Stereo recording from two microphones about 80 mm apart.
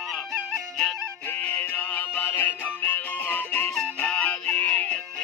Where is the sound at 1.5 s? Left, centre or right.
Centre.